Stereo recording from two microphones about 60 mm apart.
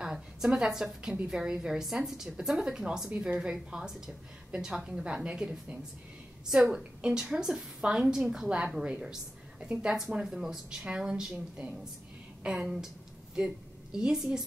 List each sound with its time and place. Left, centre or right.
0.0 s a woman's voice: centre
3.1 s a woman's voice: right
3.3 s a woman's voice: centre
13.9 s a woman's voice: centre